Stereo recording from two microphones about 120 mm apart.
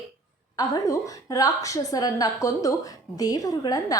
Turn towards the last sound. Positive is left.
turn(degrees=30)  # may be behind; listen again after turning